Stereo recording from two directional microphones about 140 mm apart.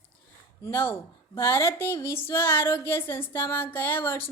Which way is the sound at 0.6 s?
15° left (ahead or behind).